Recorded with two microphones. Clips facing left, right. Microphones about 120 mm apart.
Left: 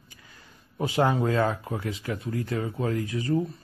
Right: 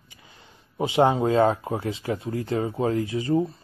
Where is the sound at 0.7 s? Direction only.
25° right (ahead or behind).